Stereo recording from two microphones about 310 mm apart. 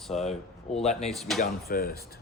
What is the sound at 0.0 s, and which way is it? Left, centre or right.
Speech, centre.